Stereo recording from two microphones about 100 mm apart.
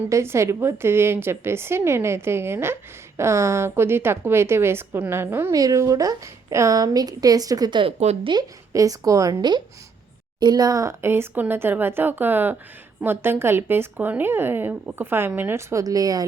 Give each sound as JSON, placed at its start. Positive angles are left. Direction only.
{"t": 0.1, "sound": "a woman's voice", "side_deg": -25}
{"t": 5.5, "sound": "a woman's voice", "side_deg": -35}
{"t": 7.7, "sound": "speech", "side_deg": -55}
{"t": 7.9, "sound": "a woman's voice", "side_deg": -90}
{"t": 8.3, "sound": "a woman's voice", "side_deg": -40}